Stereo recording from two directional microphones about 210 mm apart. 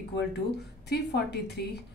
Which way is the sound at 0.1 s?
50° left (ahead or behind).